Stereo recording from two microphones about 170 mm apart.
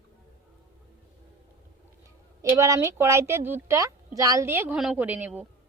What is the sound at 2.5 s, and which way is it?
Speech, 20° right (ahead or behind).